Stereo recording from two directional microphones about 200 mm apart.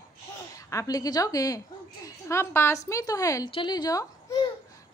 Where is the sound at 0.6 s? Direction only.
15° left (ahead or behind).